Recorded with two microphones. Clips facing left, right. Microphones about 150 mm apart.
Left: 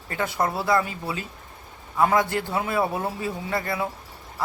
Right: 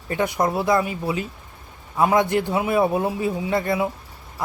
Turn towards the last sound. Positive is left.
turn(degrees=-20)  # may be behind; listen again after turning